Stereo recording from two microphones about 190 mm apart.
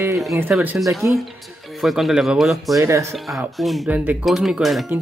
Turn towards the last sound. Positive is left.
turn(degrees=0)  # may be behind; listen again after turning